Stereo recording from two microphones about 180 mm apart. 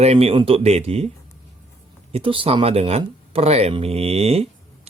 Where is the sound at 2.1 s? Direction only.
30° right (ahead or behind).